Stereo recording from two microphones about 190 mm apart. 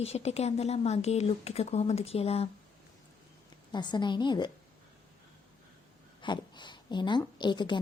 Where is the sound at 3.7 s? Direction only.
25° left (ahead or behind).